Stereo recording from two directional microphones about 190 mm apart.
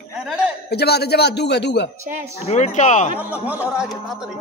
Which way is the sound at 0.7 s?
60° left (ahead or behind).